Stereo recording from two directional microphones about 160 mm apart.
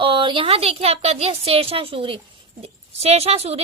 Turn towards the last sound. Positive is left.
turn(degrees=-40)  # may be behind; listen again after turning